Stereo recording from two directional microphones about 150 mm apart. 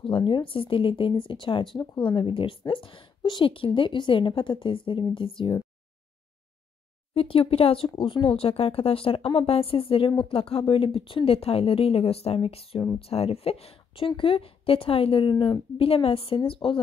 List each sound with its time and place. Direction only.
0.0 s speech: 35° left (ahead or behind)
7.2 s speech: 40° left (ahead or behind)